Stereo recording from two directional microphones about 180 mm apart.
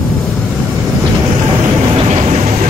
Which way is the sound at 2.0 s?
35° right (ahead or behind).